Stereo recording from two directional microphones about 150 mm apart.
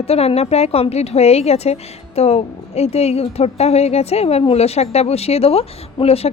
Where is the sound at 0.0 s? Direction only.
40° left (ahead or behind).